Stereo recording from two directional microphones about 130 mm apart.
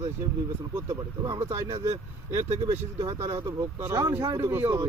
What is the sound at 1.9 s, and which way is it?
Speech, 55° right (ahead or behind).